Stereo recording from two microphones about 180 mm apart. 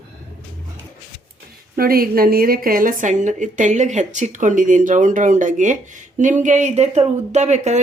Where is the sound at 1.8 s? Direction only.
55° right (ahead or behind).